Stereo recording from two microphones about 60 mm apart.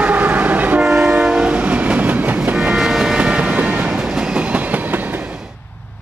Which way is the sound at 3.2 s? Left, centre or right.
Centre.